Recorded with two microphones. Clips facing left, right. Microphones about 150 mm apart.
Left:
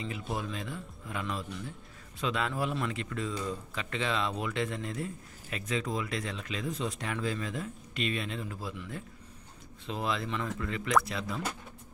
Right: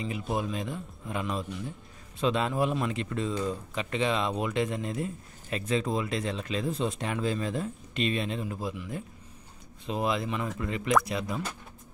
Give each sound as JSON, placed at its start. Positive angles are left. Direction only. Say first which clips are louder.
{"t": 0.3, "sound": "speech", "louder": "right 6 dB", "side_deg": -20}
{"t": 9.8, "sound": "speech", "louder": "right 4 dB", "side_deg": -15}